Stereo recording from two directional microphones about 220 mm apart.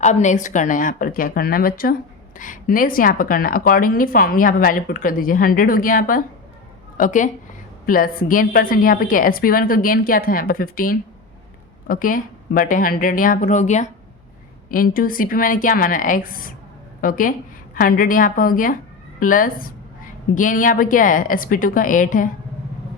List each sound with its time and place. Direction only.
0.0 s a woman's voice: 35° left (ahead or behind)